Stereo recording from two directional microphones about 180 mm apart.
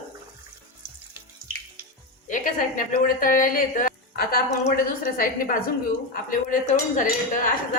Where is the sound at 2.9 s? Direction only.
50° left (ahead or behind).